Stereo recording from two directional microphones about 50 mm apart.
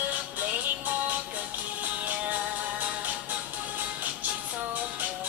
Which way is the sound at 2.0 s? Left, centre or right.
Right.